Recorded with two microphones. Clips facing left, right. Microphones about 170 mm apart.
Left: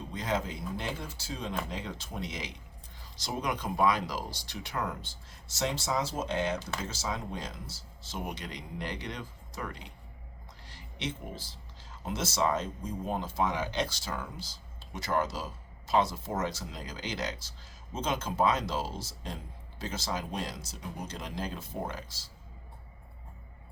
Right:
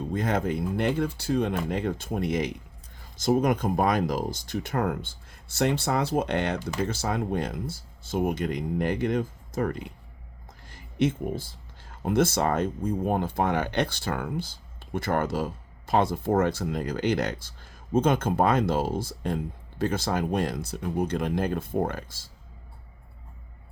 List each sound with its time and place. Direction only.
0.1 s speech: 55° right (ahead or behind)